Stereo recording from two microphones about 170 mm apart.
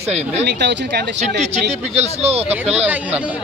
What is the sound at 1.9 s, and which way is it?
Speech, 35° right (ahead or behind).